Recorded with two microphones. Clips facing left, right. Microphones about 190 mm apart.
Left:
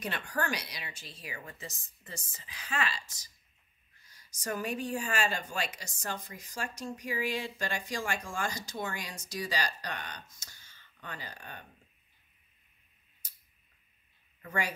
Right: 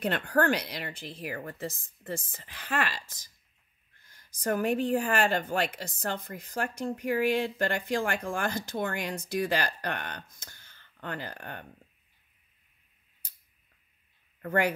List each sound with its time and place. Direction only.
0.0 s a woman's voice: 60° right (ahead or behind)
14.4 s speech: 60° right (ahead or behind)